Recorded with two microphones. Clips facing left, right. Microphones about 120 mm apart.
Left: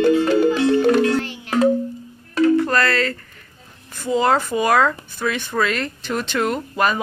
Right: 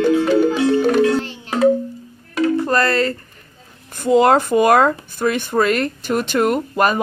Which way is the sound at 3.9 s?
55° right (ahead or behind).